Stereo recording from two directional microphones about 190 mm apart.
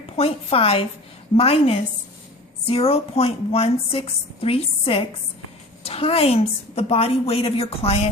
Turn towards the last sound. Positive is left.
turn(degrees=30)  # may be behind; listen again after turning